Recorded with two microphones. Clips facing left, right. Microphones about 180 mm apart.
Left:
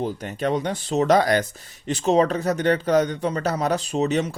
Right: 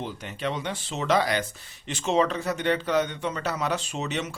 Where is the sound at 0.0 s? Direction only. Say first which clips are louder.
Left 6 dB; 40° left (ahead or behind).